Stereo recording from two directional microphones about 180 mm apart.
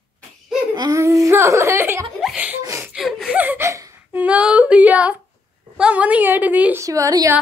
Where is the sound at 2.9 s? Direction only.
5° right (ahead or behind); by 7.4 s 20° right (ahead or behind).